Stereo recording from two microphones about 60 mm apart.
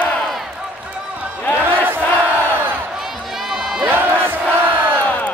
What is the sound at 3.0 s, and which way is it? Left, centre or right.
Run, centre.